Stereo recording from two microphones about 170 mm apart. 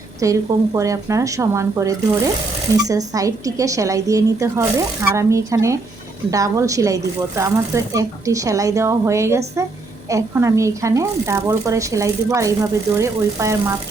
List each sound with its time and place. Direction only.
0.2 s speech: 20° right (ahead or behind)